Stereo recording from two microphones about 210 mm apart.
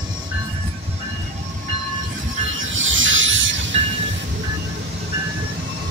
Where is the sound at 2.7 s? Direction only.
65° right (ahead or behind).